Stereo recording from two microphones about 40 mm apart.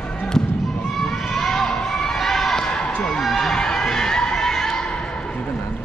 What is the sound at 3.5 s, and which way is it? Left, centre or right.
Music, centre.